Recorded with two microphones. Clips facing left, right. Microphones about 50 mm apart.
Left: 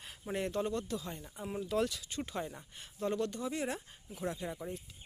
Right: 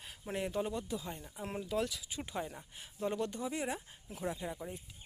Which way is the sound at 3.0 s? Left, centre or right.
Centre.